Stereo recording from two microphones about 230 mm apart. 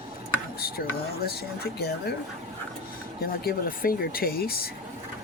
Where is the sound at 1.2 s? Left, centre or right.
Left.